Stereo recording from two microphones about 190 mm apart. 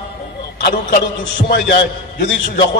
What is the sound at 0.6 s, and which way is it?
Speech, 60° left (ahead or behind).